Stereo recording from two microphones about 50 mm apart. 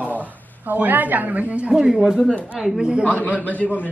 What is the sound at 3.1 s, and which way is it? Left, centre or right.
Speech, left.